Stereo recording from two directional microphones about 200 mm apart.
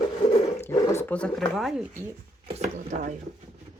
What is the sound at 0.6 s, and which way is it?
Speech, 15° left (ahead or behind).